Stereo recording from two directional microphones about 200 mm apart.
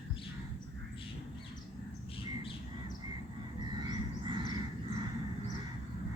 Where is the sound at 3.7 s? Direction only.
20° right (ahead or behind).